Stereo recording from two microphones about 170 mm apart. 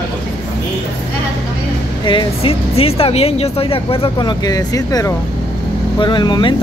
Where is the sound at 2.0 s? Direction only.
30° left (ahead or behind).